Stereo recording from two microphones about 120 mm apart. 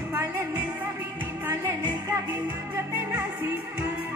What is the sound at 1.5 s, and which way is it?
Music, 20° right (ahead or behind).